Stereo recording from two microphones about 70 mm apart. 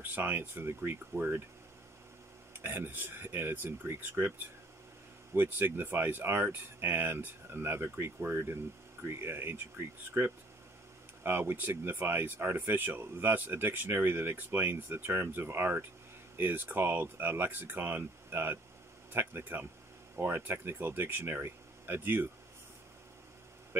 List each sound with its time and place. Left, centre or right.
0.0 s speech: right
2.6 s speech: right